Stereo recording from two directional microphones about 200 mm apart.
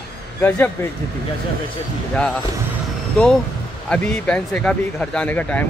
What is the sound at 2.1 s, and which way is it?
Speech, 5° left (ahead or behind).